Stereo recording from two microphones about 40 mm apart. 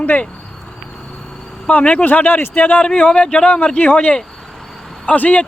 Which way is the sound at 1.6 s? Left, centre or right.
Left.